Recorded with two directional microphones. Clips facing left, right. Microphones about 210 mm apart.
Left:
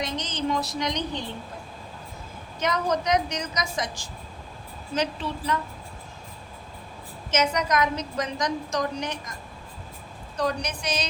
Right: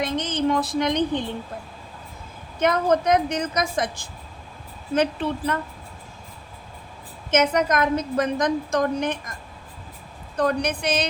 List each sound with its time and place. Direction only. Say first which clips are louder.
0.0 s a sound: right 6 dB; 55° right (ahead or behind)
2.6 s a woman's voice: right 6 dB; 55° right (ahead or behind)
7.3 s a woman's voice: right 4 dB; 55° right (ahead or behind)
10.3 s a woman's voice: right 5 dB; 55° right (ahead or behind)